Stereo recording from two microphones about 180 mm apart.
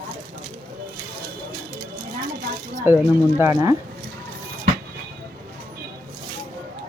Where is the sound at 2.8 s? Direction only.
15° right (ahead or behind).